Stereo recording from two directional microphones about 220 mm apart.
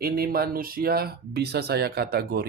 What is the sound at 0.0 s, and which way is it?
Speech, 45° right (ahead or behind).